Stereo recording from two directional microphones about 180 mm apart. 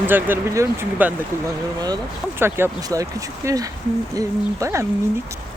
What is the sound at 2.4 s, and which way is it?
Speech, 15° right (ahead or behind).